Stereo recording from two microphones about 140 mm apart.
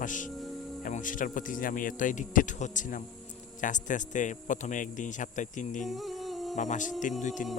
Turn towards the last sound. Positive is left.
turn(degrees=65)  # may be behind; listen again after turning